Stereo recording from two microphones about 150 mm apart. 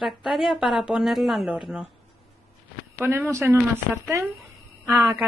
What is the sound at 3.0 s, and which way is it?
Speech, 15° right (ahead or behind).